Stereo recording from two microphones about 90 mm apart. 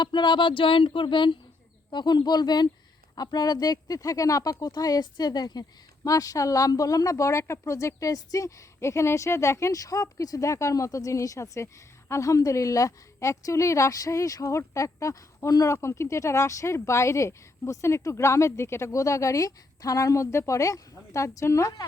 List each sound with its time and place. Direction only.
0.0 s speech: 60° left (ahead or behind)
6.1 s a woman's voice: 40° left (ahead or behind)